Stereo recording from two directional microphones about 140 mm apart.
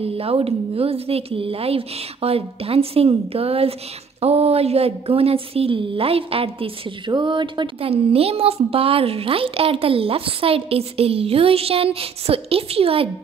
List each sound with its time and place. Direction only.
0.0 s speech: 45° right (ahead or behind)